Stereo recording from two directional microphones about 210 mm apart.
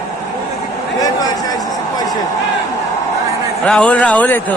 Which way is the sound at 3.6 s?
5° left (ahead or behind).